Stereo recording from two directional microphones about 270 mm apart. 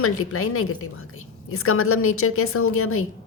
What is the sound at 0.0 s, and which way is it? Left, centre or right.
A woman's voice, left.